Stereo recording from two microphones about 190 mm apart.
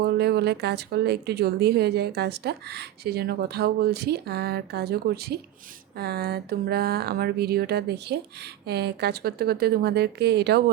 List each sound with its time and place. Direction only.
0.0 s speech: 60° right (ahead or behind)